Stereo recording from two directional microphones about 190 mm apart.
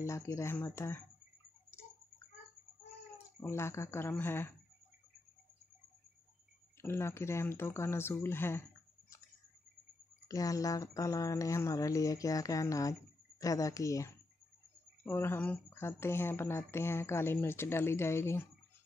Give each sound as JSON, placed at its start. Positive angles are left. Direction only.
{"t": 0.0, "sound": "speech", "side_deg": 15}
{"t": 3.4, "sound": "speech", "side_deg": 15}
{"t": 6.8, "sound": "speech", "side_deg": 15}
{"t": 10.2, "sound": "speech", "side_deg": 20}